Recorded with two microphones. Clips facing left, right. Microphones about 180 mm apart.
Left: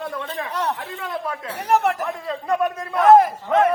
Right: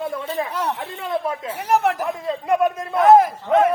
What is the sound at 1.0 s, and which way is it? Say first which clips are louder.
Speech: right 4 dB; 25° right (ahead or behind).